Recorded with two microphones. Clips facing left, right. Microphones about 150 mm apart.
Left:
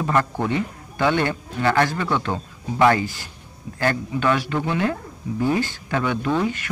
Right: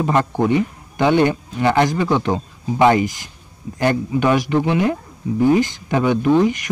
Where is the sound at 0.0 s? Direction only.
20° right (ahead or behind).